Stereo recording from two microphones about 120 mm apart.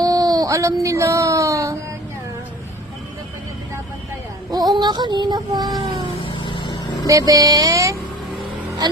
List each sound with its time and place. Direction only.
0.0 s speech: 30° right (ahead or behind)
4.5 s child singing: 35° right (ahead or behind)
5.8 s vehicle: 50° right (ahead or behind)
6.2 s vehicle: 45° left (ahead or behind)
7.1 s music: 30° right (ahead or behind)
8.8 s child singing: 35° right (ahead or behind)